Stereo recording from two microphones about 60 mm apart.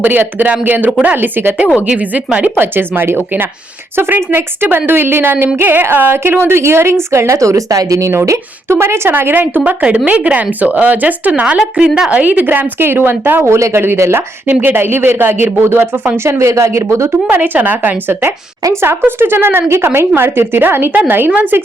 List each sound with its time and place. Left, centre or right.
0.0 s a woman's voice: right
1.7 s speech: right
2.6 s a woman's voice: right
8.1 s a woman's voice: right
9.6 s speech: right
11.9 s a woman's voice: centre
12.2 s a woman's voice: right
13.5 s a woman's voice: right
14.5 s a woman's voice: right
16.5 s speech: right
17.2 s speech: right
18.1 s a woman's voice: right